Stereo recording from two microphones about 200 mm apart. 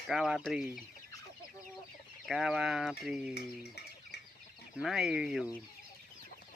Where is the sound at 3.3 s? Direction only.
55° left (ahead or behind).